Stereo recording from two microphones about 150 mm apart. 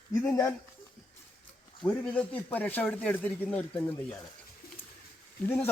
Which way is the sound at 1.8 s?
10° left (ahead or behind).